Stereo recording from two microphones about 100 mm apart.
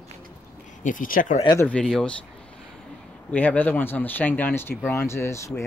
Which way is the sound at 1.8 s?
10° left (ahead or behind).